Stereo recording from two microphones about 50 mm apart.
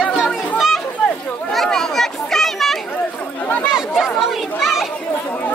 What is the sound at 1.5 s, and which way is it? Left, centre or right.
Children playing, centre.